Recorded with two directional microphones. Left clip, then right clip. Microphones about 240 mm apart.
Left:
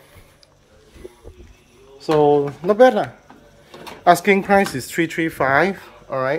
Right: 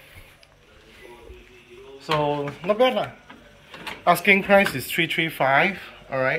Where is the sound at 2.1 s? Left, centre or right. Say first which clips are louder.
Left 8 dB; left.